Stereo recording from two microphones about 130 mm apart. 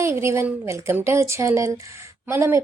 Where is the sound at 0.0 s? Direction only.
20° right (ahead or behind).